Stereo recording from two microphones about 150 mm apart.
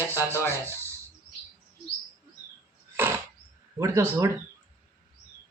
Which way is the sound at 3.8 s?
20° right (ahead or behind).